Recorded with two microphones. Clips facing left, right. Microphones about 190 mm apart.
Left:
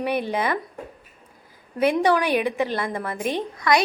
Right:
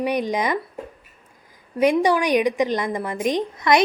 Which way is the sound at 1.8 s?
15° right (ahead or behind).